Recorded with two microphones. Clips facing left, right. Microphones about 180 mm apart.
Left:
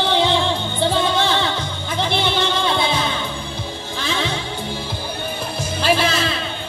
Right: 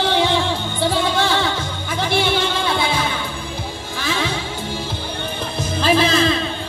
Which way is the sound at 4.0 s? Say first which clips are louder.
Right 1 dB; 20° left (ahead or behind).